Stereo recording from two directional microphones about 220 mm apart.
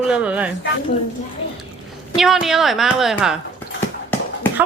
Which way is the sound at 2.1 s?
Centre (ahead or behind).